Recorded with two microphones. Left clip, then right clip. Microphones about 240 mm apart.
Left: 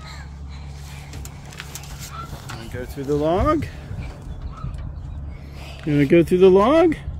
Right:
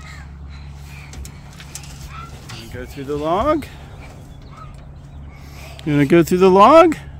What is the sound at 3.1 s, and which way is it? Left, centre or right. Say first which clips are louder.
Speech: right 1 dB; centre.